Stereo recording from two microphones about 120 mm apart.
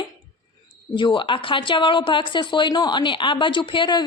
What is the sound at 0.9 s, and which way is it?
A woman's voice, 40° left (ahead or behind).